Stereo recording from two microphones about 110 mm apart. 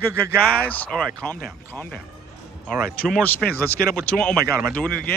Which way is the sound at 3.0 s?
15° left (ahead or behind).